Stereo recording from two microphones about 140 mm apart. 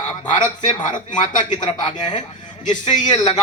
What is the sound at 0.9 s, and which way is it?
Speech, 65° left (ahead or behind).